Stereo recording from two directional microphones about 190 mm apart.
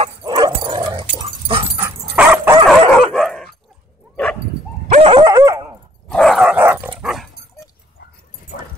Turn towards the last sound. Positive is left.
turn(degrees=0)  # may be behind; listen again after turning